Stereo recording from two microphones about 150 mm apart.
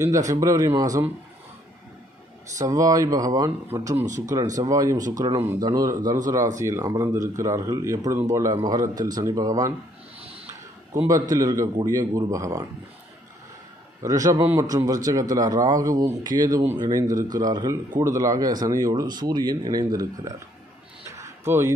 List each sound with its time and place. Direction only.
0.0 s a man's voice: 20° right (ahead or behind)
2.6 s a man's voice: 25° right (ahead or behind)
3.6 s a man's voice: 15° right (ahead or behind)
10.2 s a sound: 45° right (ahead or behind)
11.2 s a man's voice: 25° right (ahead or behind)
14.0 s a man's voice: 25° right (ahead or behind)
21.1 s a sound: 20° right (ahead or behind)